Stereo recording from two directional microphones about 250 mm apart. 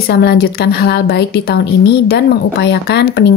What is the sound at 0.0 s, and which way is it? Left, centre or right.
A woman's voice, left.